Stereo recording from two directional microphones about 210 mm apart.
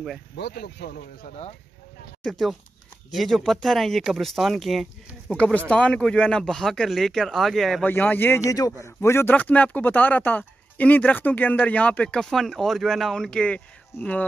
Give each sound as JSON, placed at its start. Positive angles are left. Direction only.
{"t": 0.4, "sound": "speech", "side_deg": 50}
{"t": 2.2, "sound": "speech", "side_deg": 0}